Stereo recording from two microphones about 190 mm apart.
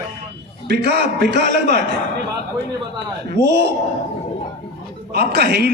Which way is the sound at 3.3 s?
60° right (ahead or behind).